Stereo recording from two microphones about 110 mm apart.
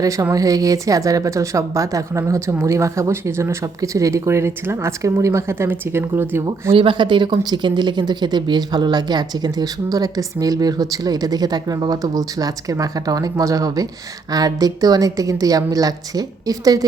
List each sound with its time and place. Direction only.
0.0 s a woman's voice: 35° right (ahead or behind)
6.7 s speech: 50° right (ahead or behind); by 16.8 s 35° right (ahead or behind)